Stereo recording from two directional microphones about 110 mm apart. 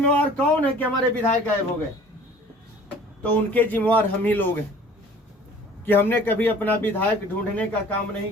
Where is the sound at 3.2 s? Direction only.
15° left (ahead or behind).